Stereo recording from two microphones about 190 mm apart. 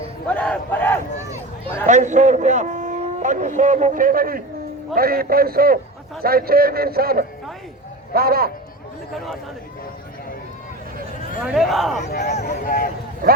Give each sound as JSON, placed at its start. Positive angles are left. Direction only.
{"t": 0.3, "sound": "speech", "side_deg": 5}
{"t": 1.9, "sound": "a man's voice", "side_deg": -40}
{"t": 11.4, "sound": "speech", "side_deg": 0}
{"t": 12.4, "sound": "speech", "side_deg": 50}